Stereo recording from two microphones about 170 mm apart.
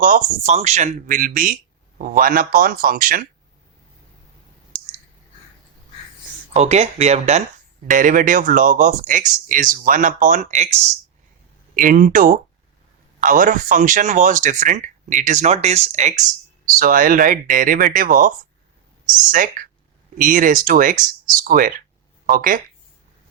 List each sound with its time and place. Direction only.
0.0 s speech: 45° right (ahead or behind)
6.5 s speech: 40° right (ahead or behind)
11.8 s speech: 50° right (ahead or behind)